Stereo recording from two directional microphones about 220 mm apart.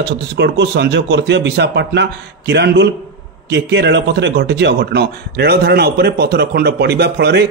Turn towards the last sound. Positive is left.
turn(degrees=-50)  # may be behind; listen again after turning